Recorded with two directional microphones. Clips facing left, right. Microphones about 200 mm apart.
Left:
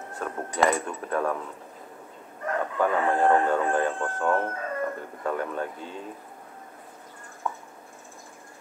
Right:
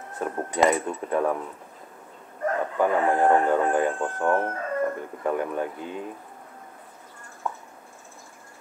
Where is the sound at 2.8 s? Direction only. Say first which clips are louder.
Right 2 dB; 15° right (ahead or behind).